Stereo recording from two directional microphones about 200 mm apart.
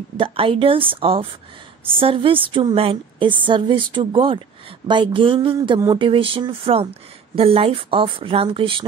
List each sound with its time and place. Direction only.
0.2 s speech: 25° right (ahead or behind)